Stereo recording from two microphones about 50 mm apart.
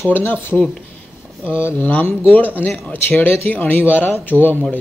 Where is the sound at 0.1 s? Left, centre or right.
Left.